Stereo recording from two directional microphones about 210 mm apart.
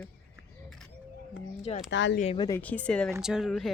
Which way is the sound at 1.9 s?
60° left (ahead or behind).